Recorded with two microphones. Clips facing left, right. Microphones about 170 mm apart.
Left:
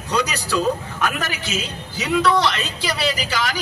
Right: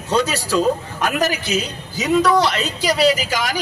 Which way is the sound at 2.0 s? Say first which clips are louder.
Right 3 dB; 45° right (ahead or behind).